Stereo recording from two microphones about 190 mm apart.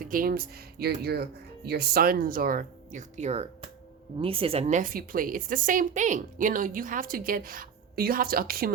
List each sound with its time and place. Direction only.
0.0 s a woman's voice: 45° right (ahead or behind)